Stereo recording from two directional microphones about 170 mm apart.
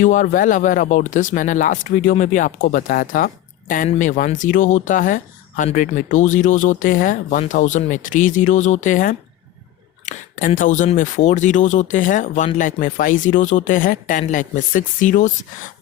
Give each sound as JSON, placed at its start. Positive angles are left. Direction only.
{"t": 0.0, "sound": "speech", "side_deg": 50}